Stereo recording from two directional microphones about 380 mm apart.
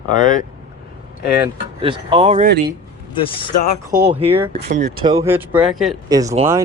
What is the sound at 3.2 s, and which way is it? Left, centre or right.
Speech, centre.